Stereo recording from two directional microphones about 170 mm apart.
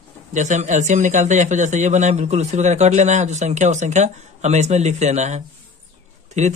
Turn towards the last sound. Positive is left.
turn(degrees=-40)  # may be behind; listen again after turning